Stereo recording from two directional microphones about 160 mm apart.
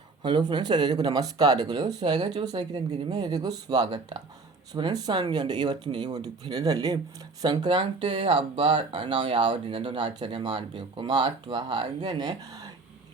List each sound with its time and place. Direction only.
0.2 s speech: 30° right (ahead or behind)